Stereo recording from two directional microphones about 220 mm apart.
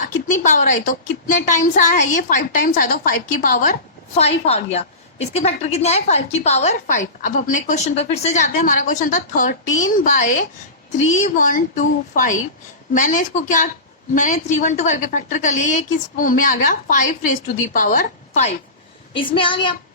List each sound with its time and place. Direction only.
0.3 s a woman's voice: 35° left (ahead or behind)
19.3 s a woman's voice: 25° left (ahead or behind)